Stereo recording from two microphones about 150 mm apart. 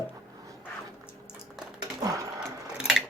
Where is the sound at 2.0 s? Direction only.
20° right (ahead or behind).